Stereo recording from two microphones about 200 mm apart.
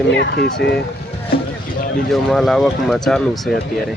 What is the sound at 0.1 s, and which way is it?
Speech, 60° left (ahead or behind).